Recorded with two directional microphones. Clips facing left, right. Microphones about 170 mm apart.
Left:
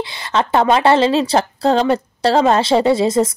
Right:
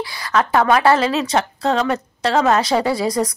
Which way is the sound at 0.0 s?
25° left (ahead or behind).